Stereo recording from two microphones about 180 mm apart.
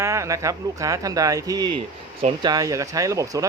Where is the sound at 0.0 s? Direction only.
15° right (ahead or behind).